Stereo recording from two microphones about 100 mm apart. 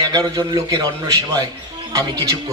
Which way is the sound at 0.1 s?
35° right (ahead or behind).